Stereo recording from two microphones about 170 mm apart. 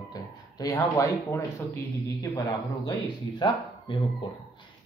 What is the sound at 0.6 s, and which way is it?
Speech, 20° left (ahead or behind).